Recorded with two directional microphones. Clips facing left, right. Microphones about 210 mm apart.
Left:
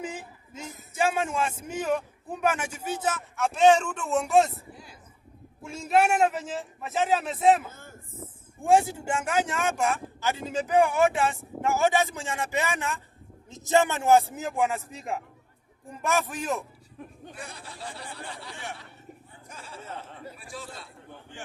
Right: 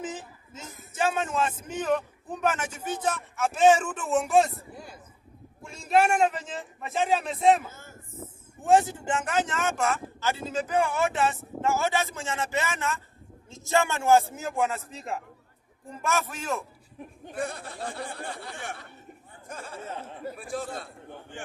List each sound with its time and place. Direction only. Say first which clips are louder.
0.0 s a man's voice: even; 10° left (ahead or behind)
4.7 s a sound: right 4 dB; 50° right (ahead or behind)
5.6 s a man's voice: even; 5° left (ahead or behind)
7.7 s a sound: even; 55° left (ahead or behind)
8.6 s speech: even; 10° left (ahead or behind)
17.3 s speech: right 13 dB; 50° right (ahead or behind)